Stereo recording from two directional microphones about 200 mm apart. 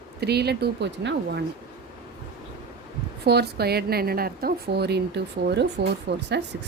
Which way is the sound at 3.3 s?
55° right (ahead or behind).